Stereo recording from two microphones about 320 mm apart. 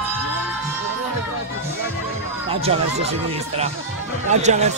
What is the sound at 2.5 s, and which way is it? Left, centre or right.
Speech, centre.